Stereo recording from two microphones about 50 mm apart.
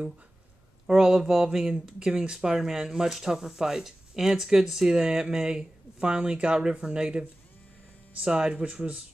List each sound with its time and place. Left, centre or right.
0.8 s speech: centre